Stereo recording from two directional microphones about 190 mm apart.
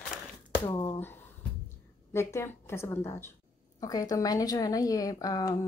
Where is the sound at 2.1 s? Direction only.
15° left (ahead or behind).